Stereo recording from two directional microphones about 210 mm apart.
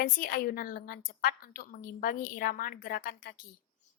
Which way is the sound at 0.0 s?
45° left (ahead or behind).